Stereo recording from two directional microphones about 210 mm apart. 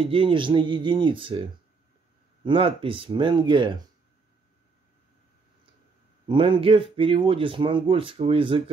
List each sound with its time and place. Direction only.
0.0 s speech: 25° right (ahead or behind)
2.4 s speech: 25° right (ahead or behind)
6.2 s speech: 25° right (ahead or behind)